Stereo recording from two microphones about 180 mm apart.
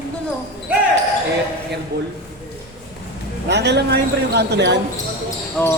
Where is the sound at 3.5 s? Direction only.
70° right (ahead or behind).